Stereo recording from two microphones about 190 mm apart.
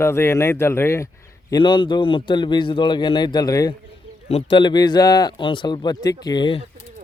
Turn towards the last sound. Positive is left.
turn(degrees=25)  # may be behind; listen again after turning